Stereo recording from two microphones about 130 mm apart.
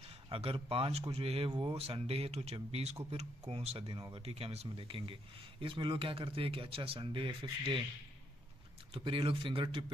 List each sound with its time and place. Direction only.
0.3 s speech: 45° right (ahead or behind)
8.9 s speech: 40° right (ahead or behind)